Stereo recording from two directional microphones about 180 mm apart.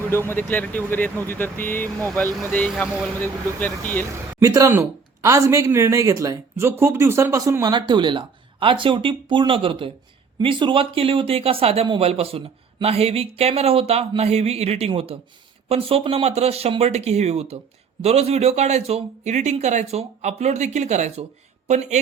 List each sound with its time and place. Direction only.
0.3 s speech: 10° left (ahead or behind)
2.8 s speech: 5° right (ahead or behind)
3.2 s speech: 10° left (ahead or behind)
4.4 s speech: 15° right (ahead or behind); by 21.2 s 40° right (ahead or behind)